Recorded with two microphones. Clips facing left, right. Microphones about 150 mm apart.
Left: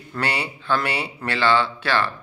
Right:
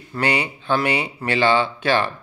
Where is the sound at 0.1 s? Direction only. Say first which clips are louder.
Right 4 dB; 15° right (ahead or behind).